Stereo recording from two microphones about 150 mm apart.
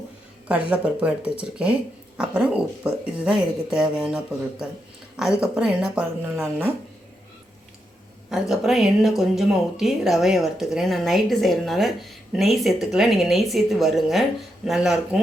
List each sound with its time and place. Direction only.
0.4 s speech: 10° right (ahead or behind)
8.3 s speech: centre (ahead or behind)